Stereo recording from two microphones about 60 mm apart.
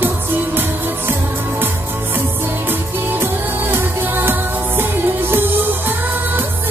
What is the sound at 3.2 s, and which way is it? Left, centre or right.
Music, right.